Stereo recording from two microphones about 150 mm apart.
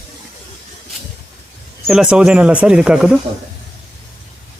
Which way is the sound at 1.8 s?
5° right (ahead or behind).